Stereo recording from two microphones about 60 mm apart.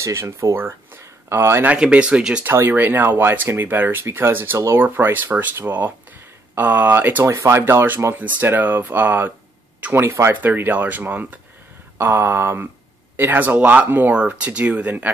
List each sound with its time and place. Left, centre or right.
0.0 s speech: right
0.6 s speech: right
1.8 s speech: centre
2.7 s speech: right
7.2 s speech: right
9.9 s speech: right
10.3 s speech: right
14.1 s speech: right